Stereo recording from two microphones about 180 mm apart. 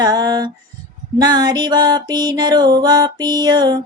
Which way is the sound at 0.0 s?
20° right (ahead or behind).